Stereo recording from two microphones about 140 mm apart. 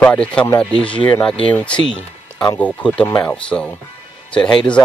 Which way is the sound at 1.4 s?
10° left (ahead or behind).